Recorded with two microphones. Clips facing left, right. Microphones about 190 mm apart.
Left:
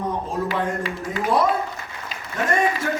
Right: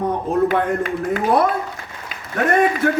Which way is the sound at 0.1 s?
60° right (ahead or behind).